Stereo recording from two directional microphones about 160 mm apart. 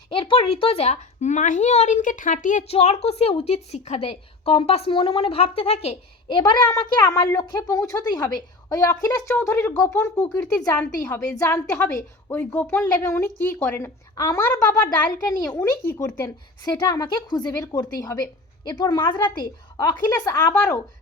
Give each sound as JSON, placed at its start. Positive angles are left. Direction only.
{"t": 0.1, "sound": "speech", "side_deg": 35}
{"t": 2.6, "sound": "a woman's voice", "side_deg": 40}